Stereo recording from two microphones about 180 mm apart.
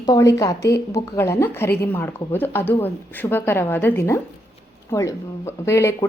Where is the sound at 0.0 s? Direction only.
20° left (ahead or behind).